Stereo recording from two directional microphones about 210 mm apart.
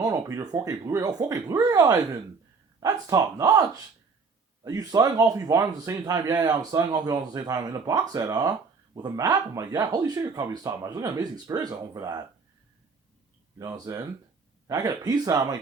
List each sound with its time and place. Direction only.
0.0 s speech: 15° right (ahead or behind)
13.6 s speech: 20° right (ahead or behind)